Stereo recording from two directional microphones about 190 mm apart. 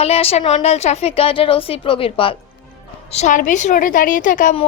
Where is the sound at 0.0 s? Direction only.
30° left (ahead or behind).